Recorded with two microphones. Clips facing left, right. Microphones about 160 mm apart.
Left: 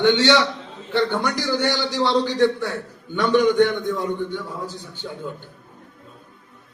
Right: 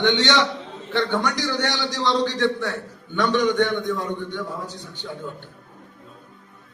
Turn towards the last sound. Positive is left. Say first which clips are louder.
# left 1 dB
turn(degrees=5)  # may be behind; listen again after turning